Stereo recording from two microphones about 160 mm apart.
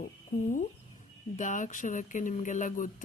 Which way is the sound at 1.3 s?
50° left (ahead or behind).